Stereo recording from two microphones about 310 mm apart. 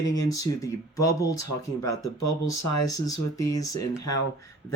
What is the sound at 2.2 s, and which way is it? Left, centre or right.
Speech, left.